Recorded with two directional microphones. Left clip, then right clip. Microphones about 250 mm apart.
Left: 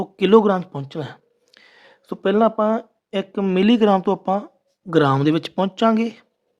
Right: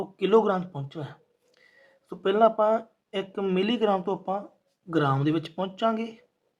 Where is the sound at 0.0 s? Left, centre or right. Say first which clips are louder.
Left 7 dB; left.